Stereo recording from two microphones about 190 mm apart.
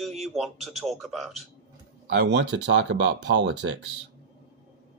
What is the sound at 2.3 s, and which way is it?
Speech, 70° right (ahead or behind).